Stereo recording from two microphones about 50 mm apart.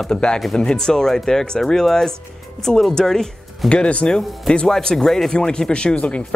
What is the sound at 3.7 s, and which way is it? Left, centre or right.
Speech, left.